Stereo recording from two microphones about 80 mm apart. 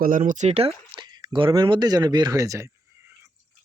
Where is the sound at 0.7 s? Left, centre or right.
Right.